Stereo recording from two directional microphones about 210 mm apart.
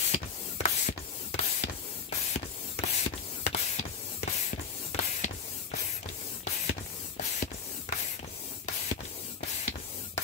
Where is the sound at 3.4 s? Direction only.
35° left (ahead or behind).